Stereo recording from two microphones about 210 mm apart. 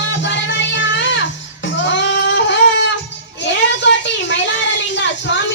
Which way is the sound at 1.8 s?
60° left (ahead or behind).